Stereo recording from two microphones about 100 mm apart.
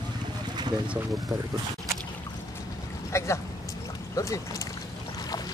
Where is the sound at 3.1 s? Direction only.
25° left (ahead or behind).